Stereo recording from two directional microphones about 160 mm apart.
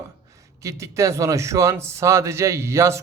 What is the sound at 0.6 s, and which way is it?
A man's voice, 20° right (ahead or behind).